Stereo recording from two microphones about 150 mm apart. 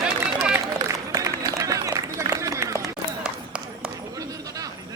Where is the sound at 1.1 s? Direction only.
25° right (ahead or behind).